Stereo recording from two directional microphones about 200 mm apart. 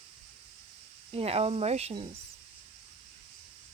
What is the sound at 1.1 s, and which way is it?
Speech, 30° right (ahead or behind).